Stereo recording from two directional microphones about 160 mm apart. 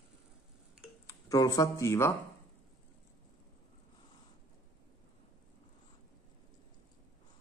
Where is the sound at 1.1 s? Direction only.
20° left (ahead or behind).